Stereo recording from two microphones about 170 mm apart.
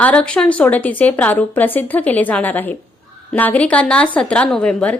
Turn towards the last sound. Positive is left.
turn(degrees=5)  # may be behind; listen again after turning